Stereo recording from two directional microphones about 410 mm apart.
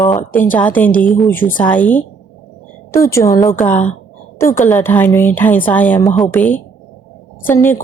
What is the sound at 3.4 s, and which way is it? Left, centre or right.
A woman's voice, centre.